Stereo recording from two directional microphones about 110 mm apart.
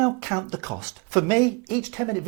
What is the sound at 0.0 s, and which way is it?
Speech, 15° right (ahead or behind).